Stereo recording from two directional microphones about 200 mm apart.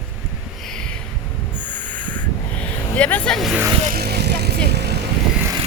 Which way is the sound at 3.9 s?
50° right (ahead or behind).